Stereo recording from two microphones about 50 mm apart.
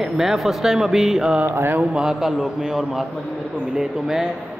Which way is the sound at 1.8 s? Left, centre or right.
Centre.